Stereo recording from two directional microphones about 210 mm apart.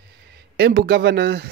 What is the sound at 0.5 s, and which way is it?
Speech, 50° right (ahead or behind).